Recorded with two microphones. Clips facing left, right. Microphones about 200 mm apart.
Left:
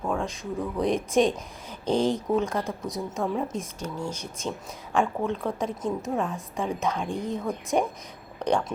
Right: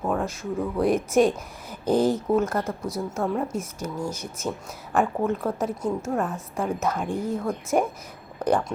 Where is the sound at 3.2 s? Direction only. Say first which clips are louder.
Right 2 dB; centre (ahead or behind).